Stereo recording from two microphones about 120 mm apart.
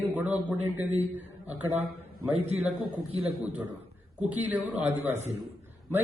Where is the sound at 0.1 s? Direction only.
10° right (ahead or behind).